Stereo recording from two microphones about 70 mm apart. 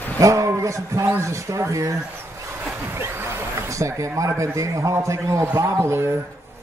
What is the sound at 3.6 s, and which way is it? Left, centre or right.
A man's voice, right.